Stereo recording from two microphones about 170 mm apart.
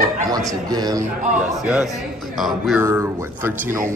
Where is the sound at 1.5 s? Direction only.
5° right (ahead or behind).